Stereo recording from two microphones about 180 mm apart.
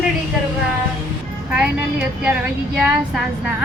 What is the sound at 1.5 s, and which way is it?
Speech, 5° right (ahead or behind).